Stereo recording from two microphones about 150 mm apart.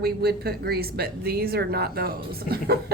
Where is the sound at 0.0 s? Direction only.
90° right.